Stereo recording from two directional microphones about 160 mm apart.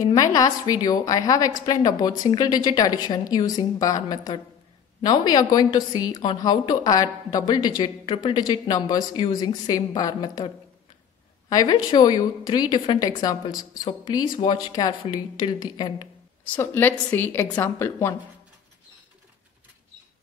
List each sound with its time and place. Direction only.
0.0 s a woman's voice: 20° left (ahead or behind)
16.4 s a woman's voice: 10° left (ahead or behind)